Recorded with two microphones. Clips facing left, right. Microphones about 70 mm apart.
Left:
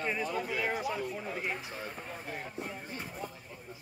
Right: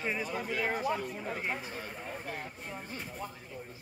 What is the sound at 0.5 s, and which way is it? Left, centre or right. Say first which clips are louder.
Speech: right 4 dB; centre.